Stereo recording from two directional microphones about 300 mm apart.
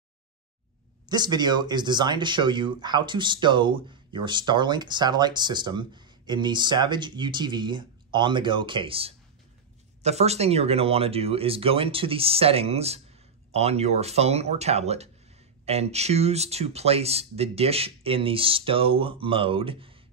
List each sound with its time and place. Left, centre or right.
1.0 s speech: centre